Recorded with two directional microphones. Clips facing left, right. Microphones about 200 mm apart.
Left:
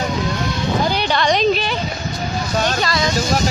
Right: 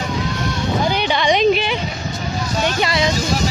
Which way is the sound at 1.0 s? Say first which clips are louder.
Even; 10° right (ahead or behind).